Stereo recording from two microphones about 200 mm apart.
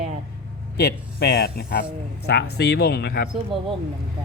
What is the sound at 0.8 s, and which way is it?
A man's voice, 50° left (ahead or behind).